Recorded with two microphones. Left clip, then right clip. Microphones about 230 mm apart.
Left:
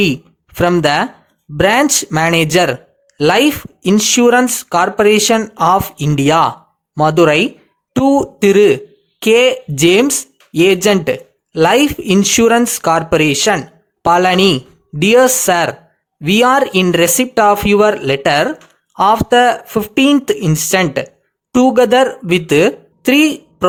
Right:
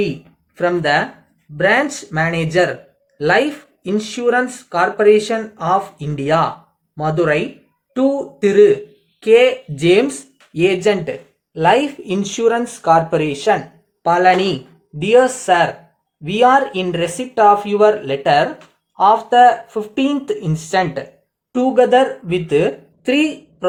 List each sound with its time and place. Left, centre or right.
0.5 s speech: left